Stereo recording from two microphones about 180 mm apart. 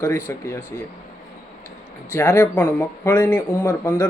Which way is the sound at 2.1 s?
15° left (ahead or behind).